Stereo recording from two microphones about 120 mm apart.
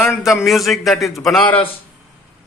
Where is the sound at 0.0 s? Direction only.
20° left (ahead or behind).